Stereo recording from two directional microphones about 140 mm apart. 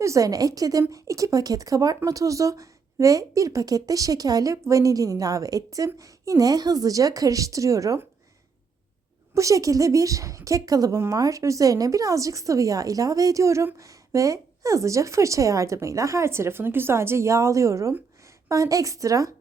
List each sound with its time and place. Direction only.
0.0 s a woman's voice: 25° right (ahead or behind)
9.3 s a woman's voice: 25° right (ahead or behind)